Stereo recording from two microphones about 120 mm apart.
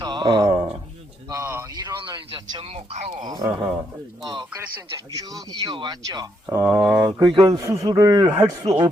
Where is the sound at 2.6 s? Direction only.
60° right (ahead or behind); by 3.3 s 80° right.